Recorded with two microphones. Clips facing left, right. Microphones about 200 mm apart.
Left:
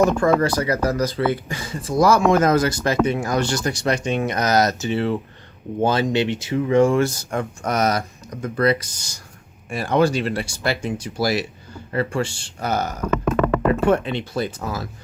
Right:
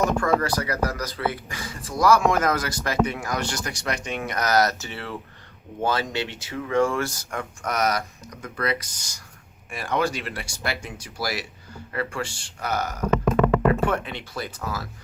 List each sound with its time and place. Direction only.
0.0 s speech: 25° left (ahead or behind)